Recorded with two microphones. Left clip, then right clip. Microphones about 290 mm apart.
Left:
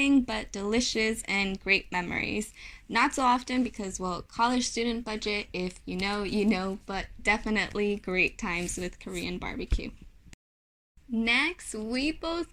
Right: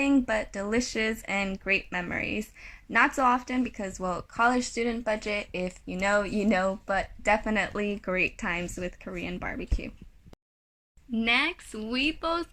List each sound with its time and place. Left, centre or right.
0.0 s speech: centre
11.1 s speech: centre